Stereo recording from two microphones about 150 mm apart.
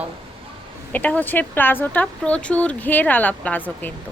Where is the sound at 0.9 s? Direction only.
10° left (ahead or behind).